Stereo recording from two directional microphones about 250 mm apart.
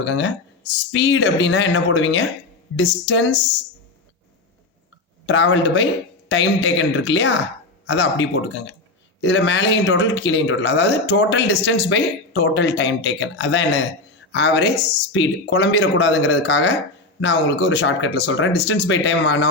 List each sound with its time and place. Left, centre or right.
0.0 s speech: left
5.2 s speech: left